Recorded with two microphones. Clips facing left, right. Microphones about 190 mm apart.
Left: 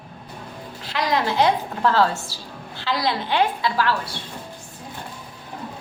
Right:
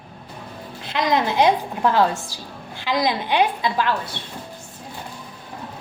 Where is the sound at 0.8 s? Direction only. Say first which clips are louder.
Right 2 dB; 20° right (ahead or behind).